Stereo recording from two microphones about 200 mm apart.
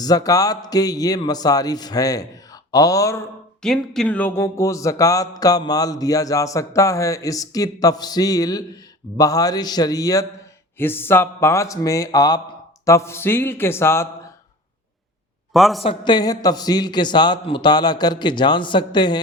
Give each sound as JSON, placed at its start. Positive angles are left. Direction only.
{"t": 0.0, "sound": "speech", "side_deg": 20}
{"t": 3.6, "sound": "speech", "side_deg": 5}
{"t": 15.5, "sound": "a man's voice", "side_deg": 0}
{"t": 15.8, "sound": "a man's voice", "side_deg": 25}